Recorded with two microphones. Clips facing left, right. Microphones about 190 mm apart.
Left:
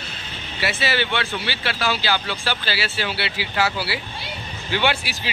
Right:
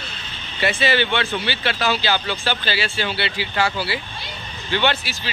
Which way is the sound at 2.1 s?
25° right (ahead or behind).